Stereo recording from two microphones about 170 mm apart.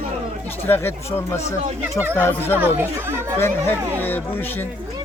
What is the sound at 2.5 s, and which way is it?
Speech, 10° right (ahead or behind).